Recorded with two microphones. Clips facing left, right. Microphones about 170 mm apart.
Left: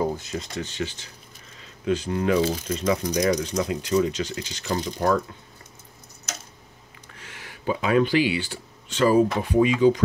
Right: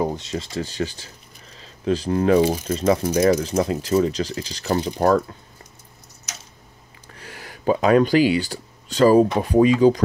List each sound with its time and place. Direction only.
0.0 s speech: 25° right (ahead or behind)
2.4 s speech: 10° right (ahead or behind)
2.7 s speech: 35° right (ahead or behind)
3.3 s speech: 45° right (ahead or behind)
7.2 s speech: 40° right (ahead or behind)